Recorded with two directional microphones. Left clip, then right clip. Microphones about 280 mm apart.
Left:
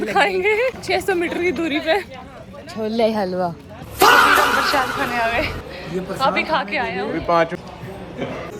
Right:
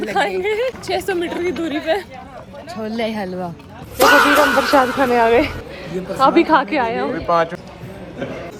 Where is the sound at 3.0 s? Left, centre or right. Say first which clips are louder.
Left 6 dB; centre.